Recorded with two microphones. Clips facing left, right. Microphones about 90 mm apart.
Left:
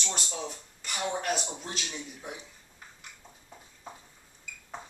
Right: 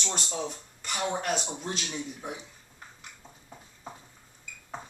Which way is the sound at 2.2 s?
20° right (ahead or behind).